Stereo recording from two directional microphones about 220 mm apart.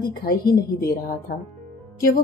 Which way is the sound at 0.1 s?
45° left (ahead or behind).